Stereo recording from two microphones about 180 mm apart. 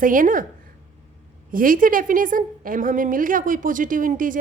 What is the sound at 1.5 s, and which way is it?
A woman's voice, 50° right (ahead or behind).